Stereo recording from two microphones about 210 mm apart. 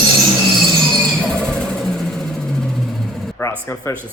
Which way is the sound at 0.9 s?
5° left (ahead or behind).